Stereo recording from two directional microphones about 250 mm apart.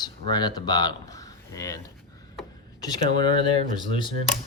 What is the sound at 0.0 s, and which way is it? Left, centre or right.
Speech, centre.